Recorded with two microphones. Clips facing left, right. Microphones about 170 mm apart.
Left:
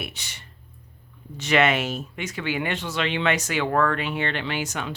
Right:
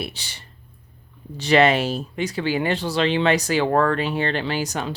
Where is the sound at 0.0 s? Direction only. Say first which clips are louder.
Right 4 dB; 30° right (ahead or behind).